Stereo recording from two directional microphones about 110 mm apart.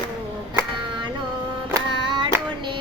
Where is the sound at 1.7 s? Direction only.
45° right (ahead or behind).